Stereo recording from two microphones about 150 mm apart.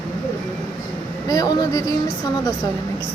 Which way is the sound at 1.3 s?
25° left (ahead or behind).